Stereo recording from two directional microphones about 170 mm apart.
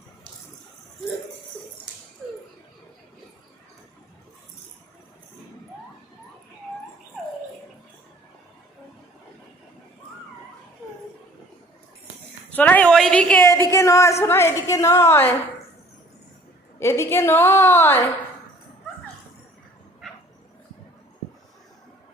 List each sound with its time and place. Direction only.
12.5 s a woman's voice: 10° left (ahead or behind)
16.8 s a woman's voice: 15° left (ahead or behind)